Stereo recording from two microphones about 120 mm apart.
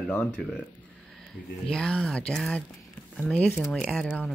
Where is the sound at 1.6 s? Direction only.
5° left (ahead or behind).